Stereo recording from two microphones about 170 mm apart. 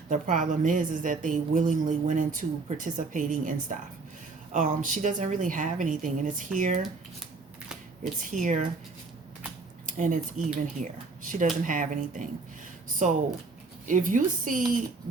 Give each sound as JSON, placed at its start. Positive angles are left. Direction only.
{"t": 0.1, "sound": "a woman's voice", "side_deg": -50}
{"t": 8.2, "sound": "a woman's voice", "side_deg": -50}
{"t": 9.8, "sound": "a woman's voice", "side_deg": -50}